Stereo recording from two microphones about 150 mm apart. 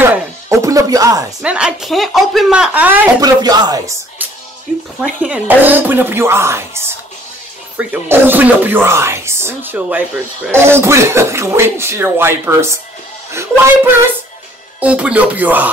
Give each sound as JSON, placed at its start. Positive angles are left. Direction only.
{"t": 0.0, "sound": "music", "side_deg": -15}
{"t": 1.4, "sound": "speech", "side_deg": -5}
{"t": 3.2, "sound": "speech", "side_deg": -25}
{"t": 5.2, "sound": "speech", "side_deg": -10}